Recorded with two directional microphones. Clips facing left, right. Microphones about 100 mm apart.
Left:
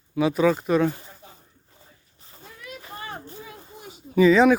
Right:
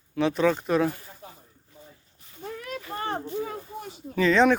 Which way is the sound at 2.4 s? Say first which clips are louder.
Right 7 dB; 50° right (ahead or behind).